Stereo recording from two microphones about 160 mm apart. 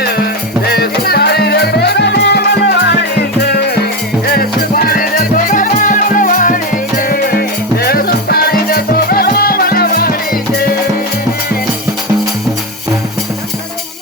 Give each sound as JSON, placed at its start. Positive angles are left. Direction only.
{"t": 0.7, "sound": "music", "side_deg": 80}
{"t": 4.3, "sound": "music", "side_deg": 70}